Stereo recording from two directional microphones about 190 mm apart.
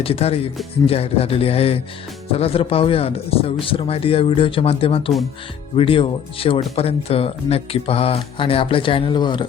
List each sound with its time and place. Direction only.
0.0 s a man's voice: 30° left (ahead or behind)